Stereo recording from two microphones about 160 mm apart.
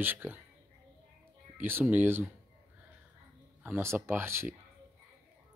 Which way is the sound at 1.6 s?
10° right (ahead or behind).